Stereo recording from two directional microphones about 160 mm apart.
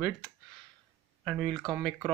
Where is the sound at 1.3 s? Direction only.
5° right (ahead or behind).